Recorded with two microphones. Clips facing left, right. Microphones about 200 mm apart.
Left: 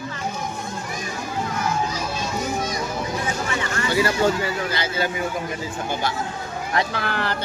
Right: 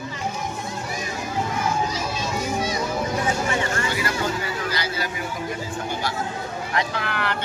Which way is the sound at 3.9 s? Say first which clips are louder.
Left 6 dB; 30° left (ahead or behind).